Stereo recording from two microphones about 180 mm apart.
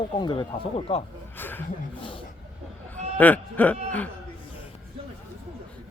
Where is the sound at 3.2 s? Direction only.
10° left (ahead or behind).